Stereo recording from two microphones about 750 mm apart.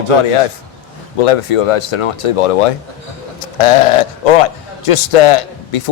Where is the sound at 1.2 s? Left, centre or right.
Left.